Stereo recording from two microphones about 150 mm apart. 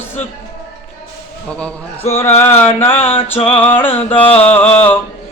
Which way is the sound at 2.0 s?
45° left (ahead or behind).